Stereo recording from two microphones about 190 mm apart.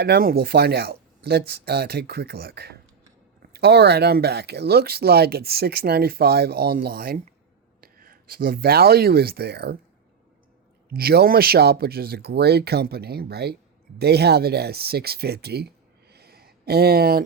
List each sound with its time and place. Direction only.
0.0 s speech: 55° right (ahead or behind)
10.8 s speech: 55° right (ahead or behind)